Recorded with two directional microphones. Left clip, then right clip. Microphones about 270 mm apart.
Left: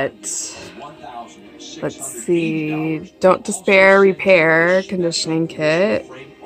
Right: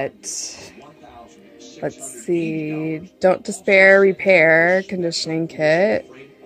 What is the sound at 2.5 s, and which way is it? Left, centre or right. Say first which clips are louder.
Music: left 3 dB; right.